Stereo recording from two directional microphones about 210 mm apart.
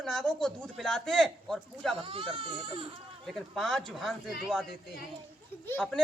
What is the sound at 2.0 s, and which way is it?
Speech, 25° right (ahead or behind).